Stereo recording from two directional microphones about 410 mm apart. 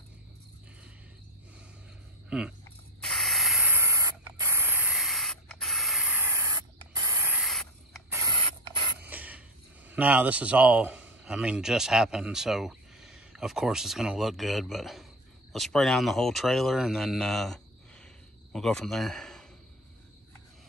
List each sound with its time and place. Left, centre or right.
2.2 s a sound: centre
3.0 s spray: centre
9.8 s a man's voice: centre